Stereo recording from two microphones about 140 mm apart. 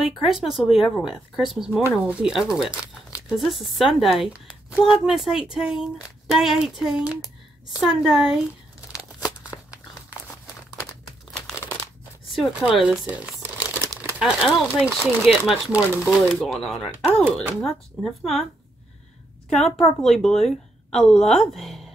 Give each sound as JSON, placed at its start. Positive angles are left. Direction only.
{"t": 0.0, "sound": "speech", "side_deg": 0}
{"t": 2.7, "sound": "crumpling", "side_deg": 20}
{"t": 3.3, "sound": "speech", "side_deg": 0}
{"t": 9.5, "sound": "crumpling", "side_deg": 20}
{"t": 12.3, "sound": "speech", "side_deg": -5}
{"t": 12.8, "sound": "crumpling", "side_deg": -10}
{"t": 14.8, "sound": "speech", "side_deg": 0}
{"t": 19.5, "sound": "speech", "side_deg": 0}